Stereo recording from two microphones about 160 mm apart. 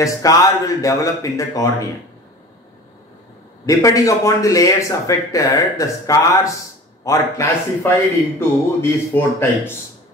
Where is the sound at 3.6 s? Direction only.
20° left (ahead or behind).